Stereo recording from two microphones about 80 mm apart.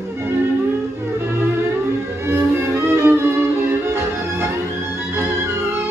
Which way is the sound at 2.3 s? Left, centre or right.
Right.